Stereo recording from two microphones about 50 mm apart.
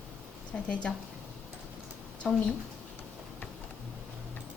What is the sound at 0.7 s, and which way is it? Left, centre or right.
Speech, centre.